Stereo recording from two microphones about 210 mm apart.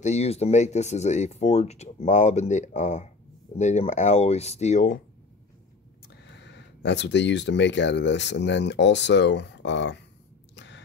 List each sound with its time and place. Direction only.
0.0 s speech: 30° left (ahead or behind)
6.0 s speech: 55° left (ahead or behind)
10.5 s a sound: 55° left (ahead or behind)